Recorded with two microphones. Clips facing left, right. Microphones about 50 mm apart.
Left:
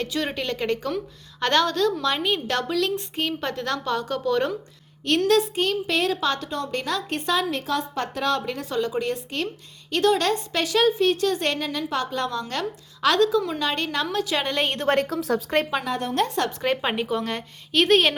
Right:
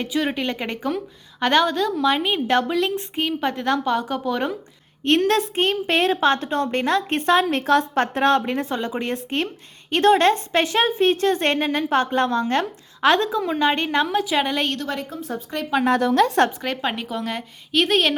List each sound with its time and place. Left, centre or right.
0.0 s a woman's voice: centre
5.0 s speech: right; by 14.6 s centre
14.9 s speech: left
16.6 s a woman's voice: centre